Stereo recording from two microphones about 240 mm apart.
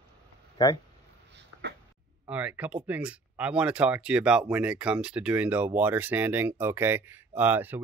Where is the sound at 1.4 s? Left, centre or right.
Right.